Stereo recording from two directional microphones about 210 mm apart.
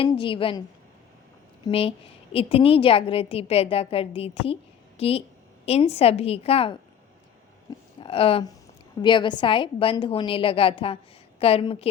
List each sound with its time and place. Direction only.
0.0 s a woman's voice: 25° left (ahead or behind)
1.6 s a woman's voice: 25° left (ahead or behind)
8.0 s a woman's voice: 25° left (ahead or behind)